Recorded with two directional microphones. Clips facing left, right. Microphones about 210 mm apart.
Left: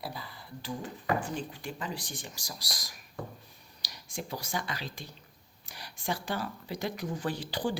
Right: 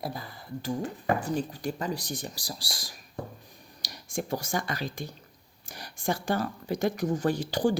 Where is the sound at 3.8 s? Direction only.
50° right (ahead or behind).